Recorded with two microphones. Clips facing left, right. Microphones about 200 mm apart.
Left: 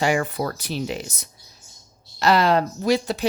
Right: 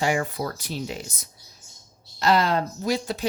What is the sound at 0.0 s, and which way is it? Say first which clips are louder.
Speech: left 3 dB; 75° left (ahead or behind).